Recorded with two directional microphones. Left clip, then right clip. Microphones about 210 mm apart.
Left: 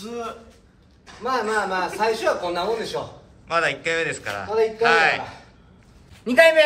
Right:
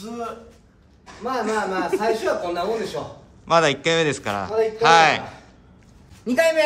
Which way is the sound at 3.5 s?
20° right (ahead or behind).